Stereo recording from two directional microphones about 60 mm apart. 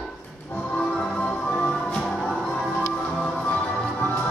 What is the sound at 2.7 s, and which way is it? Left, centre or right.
Music, left.